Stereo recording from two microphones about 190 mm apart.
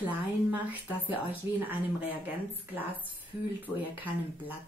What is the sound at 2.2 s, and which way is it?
Speech, 10° right (ahead or behind).